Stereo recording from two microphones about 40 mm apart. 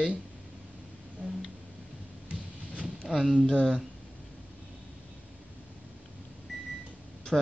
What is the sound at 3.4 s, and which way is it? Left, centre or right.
Speech, centre.